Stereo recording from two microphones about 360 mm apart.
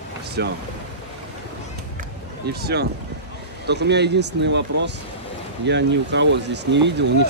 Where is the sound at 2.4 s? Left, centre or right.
Right.